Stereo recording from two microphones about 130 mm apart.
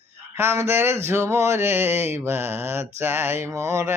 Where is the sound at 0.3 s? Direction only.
20° right (ahead or behind).